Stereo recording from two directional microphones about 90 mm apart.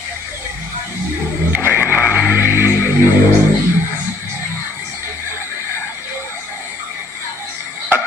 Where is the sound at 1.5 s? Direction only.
20° right (ahead or behind).